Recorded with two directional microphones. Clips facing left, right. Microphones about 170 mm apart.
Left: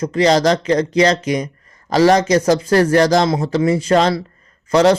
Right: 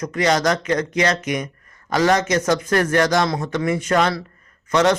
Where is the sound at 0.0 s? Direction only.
30° left (ahead or behind).